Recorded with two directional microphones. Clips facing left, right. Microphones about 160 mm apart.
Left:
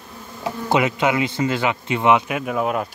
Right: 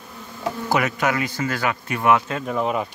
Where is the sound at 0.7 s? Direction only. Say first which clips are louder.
Left 3 dB; 20° left (ahead or behind).